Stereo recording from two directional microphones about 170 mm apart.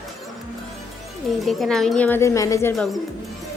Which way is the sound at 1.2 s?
Centre (ahead or behind).